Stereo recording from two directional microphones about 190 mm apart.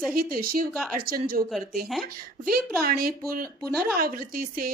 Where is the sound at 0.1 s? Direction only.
50° right (ahead or behind).